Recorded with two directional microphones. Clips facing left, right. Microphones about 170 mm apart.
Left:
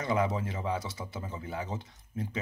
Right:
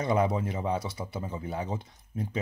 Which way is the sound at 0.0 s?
20° right (ahead or behind).